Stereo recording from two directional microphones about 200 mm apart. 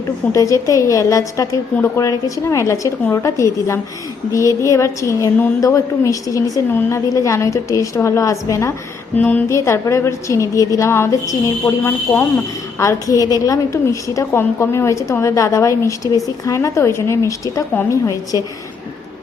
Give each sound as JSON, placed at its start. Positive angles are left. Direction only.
{"t": 0.3, "sound": "a woman's voice", "side_deg": 15}